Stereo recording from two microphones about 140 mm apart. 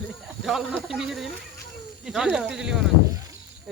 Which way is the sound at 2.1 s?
5° right (ahead or behind).